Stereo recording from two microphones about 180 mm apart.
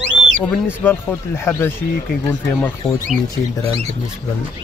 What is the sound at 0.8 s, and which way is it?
Speech, 10° left (ahead or behind).